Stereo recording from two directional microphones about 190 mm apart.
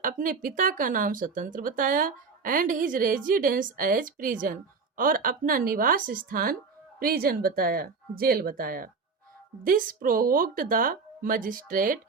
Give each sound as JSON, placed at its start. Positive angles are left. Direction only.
{"t": 0.0, "sound": "speech", "side_deg": -45}